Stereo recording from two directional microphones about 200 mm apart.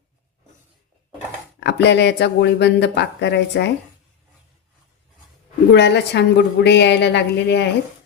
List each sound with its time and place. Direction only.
1.6 s speech: 60° left (ahead or behind)
5.7 s speech: 60° left (ahead or behind)